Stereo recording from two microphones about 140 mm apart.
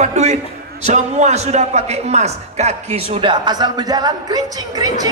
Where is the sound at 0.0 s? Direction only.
55° right (ahead or behind).